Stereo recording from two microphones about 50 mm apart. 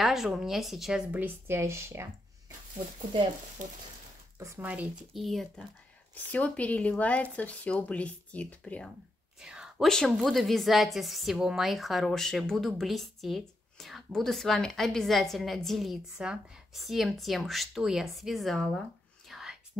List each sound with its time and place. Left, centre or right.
0.0 s a woman's voice: centre
1.5 s speech: right
4.6 s speech: right
5.1 s a woman's voice: centre
6.1 s speech: left
9.4 s a sound: centre
9.8 s a woman's voice: centre
16.2 s a woman's voice: centre
19.2 s whispering: centre